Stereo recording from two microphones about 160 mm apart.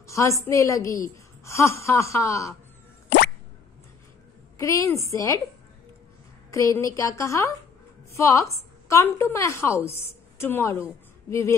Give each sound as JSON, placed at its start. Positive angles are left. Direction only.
{"t": 0.0, "sound": "a woman's voice", "side_deg": 20}
{"t": 4.6, "sound": "a woman's voice", "side_deg": 20}
{"t": 6.5, "sound": "a woman's voice", "side_deg": 20}